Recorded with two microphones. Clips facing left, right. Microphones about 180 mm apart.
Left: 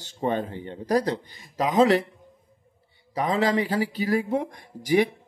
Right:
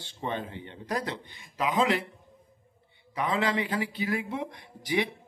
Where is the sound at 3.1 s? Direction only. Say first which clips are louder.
Left 5 dB; 40° left (ahead or behind).